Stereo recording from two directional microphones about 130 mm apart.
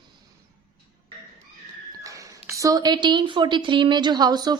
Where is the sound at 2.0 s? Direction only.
25° right (ahead or behind).